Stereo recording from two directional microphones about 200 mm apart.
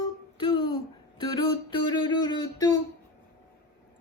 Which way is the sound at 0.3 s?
25° left (ahead or behind).